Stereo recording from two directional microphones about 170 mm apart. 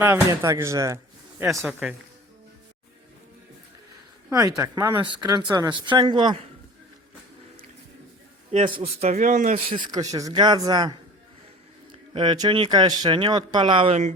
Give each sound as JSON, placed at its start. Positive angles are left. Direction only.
{"t": 0.0, "sound": "speech", "side_deg": -15}
{"t": 4.3, "sound": "speech", "side_deg": -20}
{"t": 8.5, "sound": "a man's voice", "side_deg": -30}
{"t": 9.6, "sound": "speech", "side_deg": -25}
{"t": 12.1, "sound": "speech", "side_deg": -25}